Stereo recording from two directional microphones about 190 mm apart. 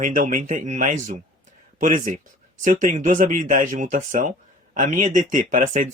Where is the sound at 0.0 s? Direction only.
45° right (ahead or behind).